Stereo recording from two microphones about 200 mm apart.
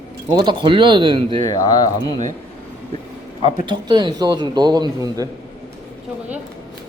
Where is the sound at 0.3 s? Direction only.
25° right (ahead or behind).